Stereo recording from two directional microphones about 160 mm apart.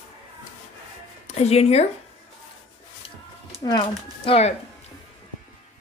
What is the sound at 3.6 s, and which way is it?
Speech, 25° left (ahead or behind).